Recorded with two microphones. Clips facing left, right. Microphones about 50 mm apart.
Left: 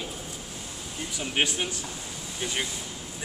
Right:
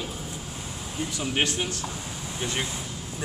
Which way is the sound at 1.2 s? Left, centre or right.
Centre.